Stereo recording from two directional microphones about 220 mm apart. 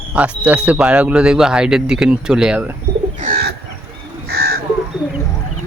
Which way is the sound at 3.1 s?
40° right (ahead or behind).